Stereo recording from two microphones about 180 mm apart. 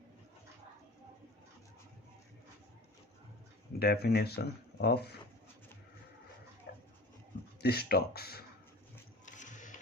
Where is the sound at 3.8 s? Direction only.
60° left (ahead or behind).